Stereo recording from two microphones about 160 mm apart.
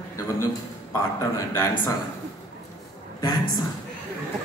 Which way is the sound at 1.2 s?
15° left (ahead or behind).